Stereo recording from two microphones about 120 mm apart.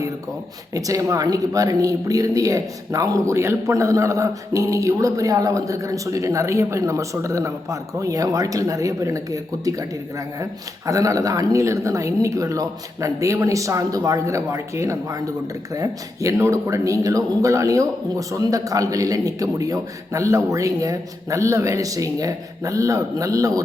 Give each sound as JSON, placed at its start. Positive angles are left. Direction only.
{"t": 0.7, "sound": "speech", "side_deg": -30}